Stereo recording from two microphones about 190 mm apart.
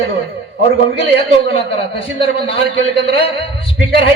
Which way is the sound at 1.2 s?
30° left (ahead or behind).